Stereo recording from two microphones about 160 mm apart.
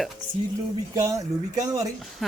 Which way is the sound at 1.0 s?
20° right (ahead or behind).